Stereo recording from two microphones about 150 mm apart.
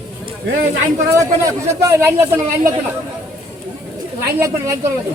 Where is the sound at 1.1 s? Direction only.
20° right (ahead or behind).